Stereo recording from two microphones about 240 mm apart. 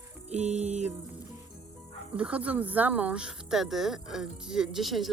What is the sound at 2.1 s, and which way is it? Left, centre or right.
Speech, centre.